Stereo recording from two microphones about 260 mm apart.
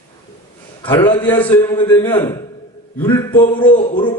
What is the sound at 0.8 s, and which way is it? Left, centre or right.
A man's voice, centre.